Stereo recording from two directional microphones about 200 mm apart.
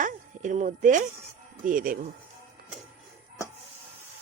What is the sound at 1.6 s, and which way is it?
Speech, 45° right (ahead or behind).